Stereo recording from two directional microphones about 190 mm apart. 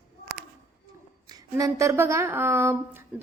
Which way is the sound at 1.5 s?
15° right (ahead or behind).